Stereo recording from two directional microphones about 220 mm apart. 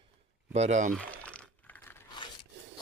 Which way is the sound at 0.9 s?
5° left (ahead or behind).